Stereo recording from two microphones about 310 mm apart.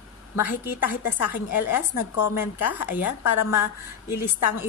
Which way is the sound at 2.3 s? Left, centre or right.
Centre.